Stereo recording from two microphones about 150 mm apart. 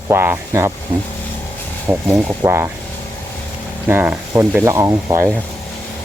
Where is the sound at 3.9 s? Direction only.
15° right (ahead or behind).